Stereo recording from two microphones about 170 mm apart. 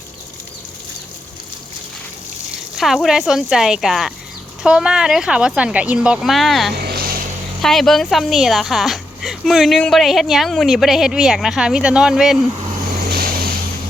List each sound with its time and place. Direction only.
2.7 s speech: centre (ahead or behind)
13.1 s vehicle: 60° right (ahead or behind)